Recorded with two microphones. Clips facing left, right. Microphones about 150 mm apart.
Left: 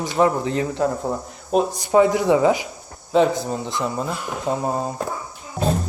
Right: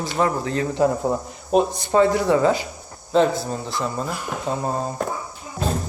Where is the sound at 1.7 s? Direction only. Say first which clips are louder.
Left 1 dB; 10° left (ahead or behind).